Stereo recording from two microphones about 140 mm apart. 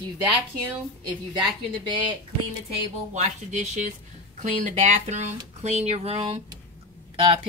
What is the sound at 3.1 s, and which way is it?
Speech, 60° right (ahead or behind).